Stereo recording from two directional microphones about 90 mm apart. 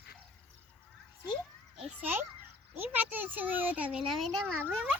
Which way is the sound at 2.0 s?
20° right (ahead or behind).